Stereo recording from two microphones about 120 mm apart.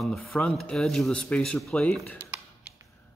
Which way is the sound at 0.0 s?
Centre (ahead or behind).